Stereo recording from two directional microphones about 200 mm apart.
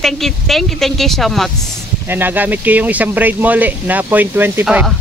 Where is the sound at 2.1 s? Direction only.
10° right (ahead or behind).